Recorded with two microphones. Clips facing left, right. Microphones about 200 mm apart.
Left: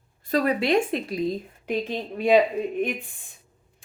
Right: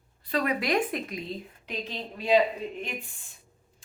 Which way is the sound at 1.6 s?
50° left (ahead or behind).